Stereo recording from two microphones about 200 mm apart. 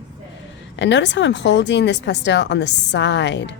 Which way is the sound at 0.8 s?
60° left (ahead or behind).